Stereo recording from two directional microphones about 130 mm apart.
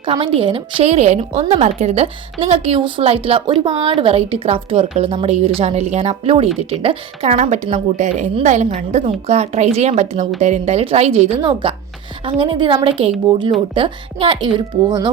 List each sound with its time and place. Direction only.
0.0 s a woman's voice: 45° right (ahead or behind)
7.3 s a woman's voice: 70° right (ahead or behind)
11.6 s a woman's voice: 45° right (ahead or behind)